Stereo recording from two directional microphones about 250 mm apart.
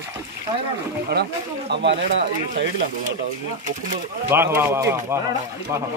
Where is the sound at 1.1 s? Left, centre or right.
Right.